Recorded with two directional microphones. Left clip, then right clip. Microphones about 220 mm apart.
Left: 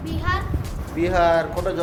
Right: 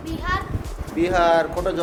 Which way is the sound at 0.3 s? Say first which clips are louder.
Even; 15° right (ahead or behind).